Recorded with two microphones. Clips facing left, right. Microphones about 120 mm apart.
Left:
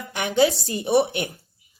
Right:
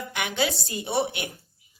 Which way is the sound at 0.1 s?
30° left (ahead or behind).